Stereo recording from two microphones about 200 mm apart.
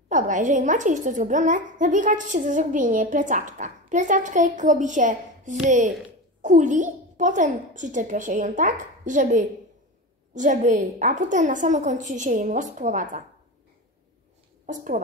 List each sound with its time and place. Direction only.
0.1 s a woman's voice: 40° right (ahead or behind)